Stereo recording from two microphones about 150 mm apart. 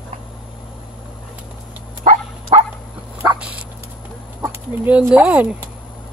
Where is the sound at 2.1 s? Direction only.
45° right (ahead or behind).